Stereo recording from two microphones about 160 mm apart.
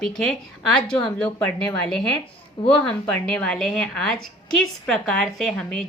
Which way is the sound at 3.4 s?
5° left (ahead or behind).